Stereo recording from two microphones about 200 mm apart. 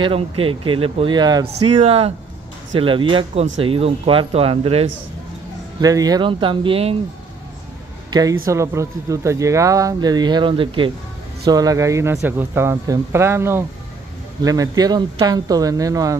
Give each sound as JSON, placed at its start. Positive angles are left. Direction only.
{"t": 0.0, "sound": "speech", "side_deg": -25}
{"t": 5.8, "sound": "speech", "side_deg": -20}
{"t": 8.1, "sound": "speech", "side_deg": -20}